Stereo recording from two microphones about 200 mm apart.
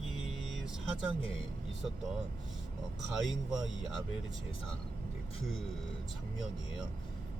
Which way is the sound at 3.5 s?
Centre (ahead or behind).